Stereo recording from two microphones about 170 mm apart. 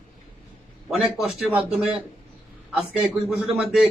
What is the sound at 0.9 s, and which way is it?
Speech, 5° right (ahead or behind).